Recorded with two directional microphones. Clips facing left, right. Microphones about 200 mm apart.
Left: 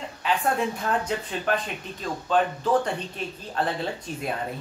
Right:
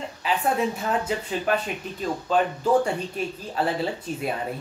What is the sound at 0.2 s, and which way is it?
Speech, 5° right (ahead or behind).